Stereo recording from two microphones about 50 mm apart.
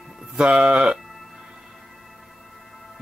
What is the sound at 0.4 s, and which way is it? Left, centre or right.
Speech, right.